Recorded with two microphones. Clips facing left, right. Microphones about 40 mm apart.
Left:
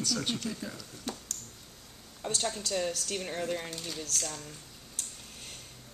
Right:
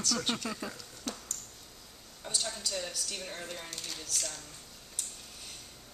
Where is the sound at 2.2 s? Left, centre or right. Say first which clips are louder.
Left 3 dB; left.